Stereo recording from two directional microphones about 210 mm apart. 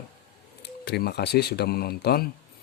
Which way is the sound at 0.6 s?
50° left (ahead or behind).